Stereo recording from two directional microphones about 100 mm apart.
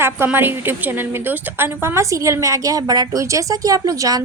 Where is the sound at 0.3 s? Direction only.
20° right (ahead or behind).